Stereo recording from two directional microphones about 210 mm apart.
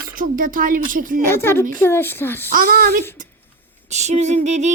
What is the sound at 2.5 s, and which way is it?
Speech, 40° right (ahead or behind).